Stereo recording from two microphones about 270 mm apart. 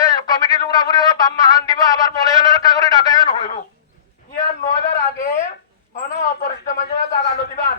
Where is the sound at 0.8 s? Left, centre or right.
Centre.